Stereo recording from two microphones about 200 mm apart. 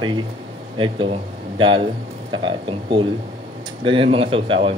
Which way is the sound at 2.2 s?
25° right (ahead or behind).